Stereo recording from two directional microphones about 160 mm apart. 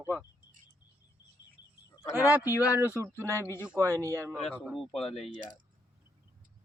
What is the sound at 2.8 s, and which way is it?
Speech, 15° right (ahead or behind).